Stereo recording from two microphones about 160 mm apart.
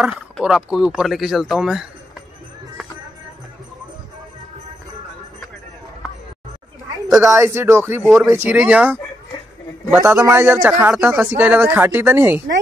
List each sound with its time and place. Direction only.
0.0 s speech: 5° right (ahead or behind)
7.2 s speech: 15° right (ahead or behind)
8.0 s speech: 5° right (ahead or behind)
10.0 s speech: 15° right (ahead or behind)